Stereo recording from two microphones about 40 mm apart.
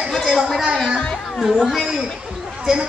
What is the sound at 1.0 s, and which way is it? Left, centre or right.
Chatter, left.